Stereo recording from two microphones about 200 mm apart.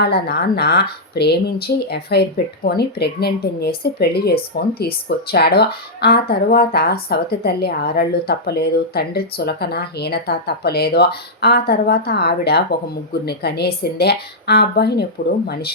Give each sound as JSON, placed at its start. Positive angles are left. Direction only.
{"t": 0.0, "sound": "speech", "side_deg": 55}